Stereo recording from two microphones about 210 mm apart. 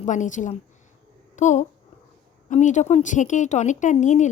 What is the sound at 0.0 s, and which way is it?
A child's voice, 35° left (ahead or behind).